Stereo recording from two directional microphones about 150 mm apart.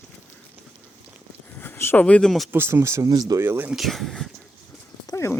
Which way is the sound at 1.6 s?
15° left (ahead or behind).